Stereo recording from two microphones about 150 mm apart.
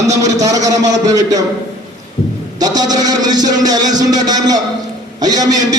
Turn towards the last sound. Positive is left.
turn(degrees=-25)  # may be behind; listen again after turning